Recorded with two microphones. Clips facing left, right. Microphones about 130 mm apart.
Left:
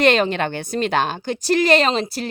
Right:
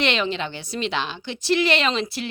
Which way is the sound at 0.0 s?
45° left (ahead or behind).